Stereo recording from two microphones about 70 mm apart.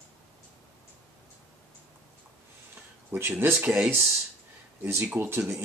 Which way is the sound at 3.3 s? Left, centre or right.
Right.